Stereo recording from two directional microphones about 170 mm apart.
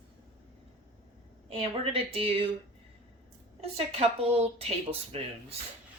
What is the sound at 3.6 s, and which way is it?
Speech, 35° right (ahead or behind).